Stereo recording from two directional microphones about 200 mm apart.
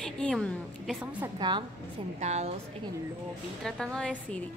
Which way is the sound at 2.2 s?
35° right (ahead or behind).